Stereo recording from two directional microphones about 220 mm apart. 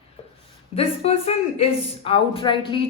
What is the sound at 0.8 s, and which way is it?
A woman's voice, 25° left (ahead or behind).